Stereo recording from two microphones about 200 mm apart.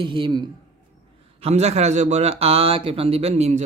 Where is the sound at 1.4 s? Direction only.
35° right (ahead or behind).